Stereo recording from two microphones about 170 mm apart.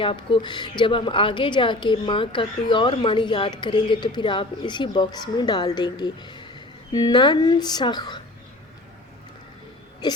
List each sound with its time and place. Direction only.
0.0 s a woman's voice: 30° left (ahead or behind)